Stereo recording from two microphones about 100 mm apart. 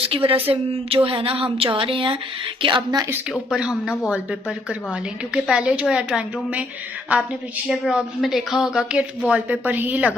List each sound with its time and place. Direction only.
0.0 s a woman's voice: 65° right (ahead or behind)
3.4 s a woman's voice: 5° right (ahead or behind)